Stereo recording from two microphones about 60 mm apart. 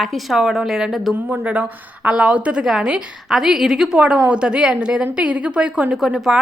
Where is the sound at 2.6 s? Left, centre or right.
Centre.